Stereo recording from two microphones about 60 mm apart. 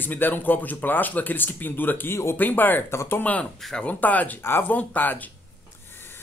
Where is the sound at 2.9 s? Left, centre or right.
Left.